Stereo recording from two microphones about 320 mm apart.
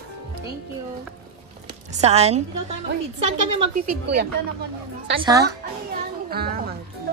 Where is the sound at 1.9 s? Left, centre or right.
Centre.